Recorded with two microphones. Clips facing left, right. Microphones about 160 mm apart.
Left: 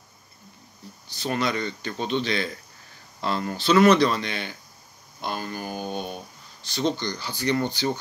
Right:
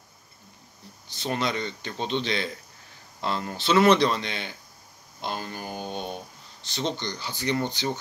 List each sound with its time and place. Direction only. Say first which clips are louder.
1.0 s speech: left 2 dB; 25° right (ahead or behind)
5.7 s a sound: left 2 dB; 10° left (ahead or behind)
6.6 s speech: left 4 dB; 25° right (ahead or behind)